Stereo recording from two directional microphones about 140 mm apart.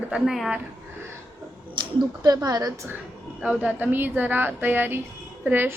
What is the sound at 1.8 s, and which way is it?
Speech, 30° right (ahead or behind).